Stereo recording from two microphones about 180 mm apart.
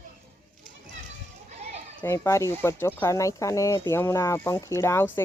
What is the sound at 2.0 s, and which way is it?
Speech, 15° left (ahead or behind).